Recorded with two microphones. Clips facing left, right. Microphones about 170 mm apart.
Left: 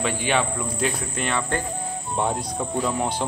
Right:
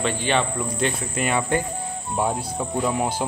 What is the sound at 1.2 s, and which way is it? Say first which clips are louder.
Speech: right 4 dB; 10° right (ahead or behind).